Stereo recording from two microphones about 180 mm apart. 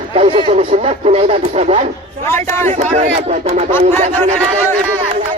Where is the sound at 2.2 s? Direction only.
15° left (ahead or behind).